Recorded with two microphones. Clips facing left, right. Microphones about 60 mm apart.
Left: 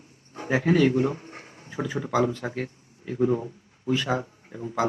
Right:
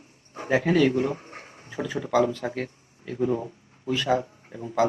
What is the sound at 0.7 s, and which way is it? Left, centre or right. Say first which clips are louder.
Speech: left 1 dB; left.